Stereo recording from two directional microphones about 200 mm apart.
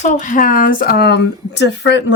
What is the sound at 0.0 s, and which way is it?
Speech, 40° left (ahead or behind).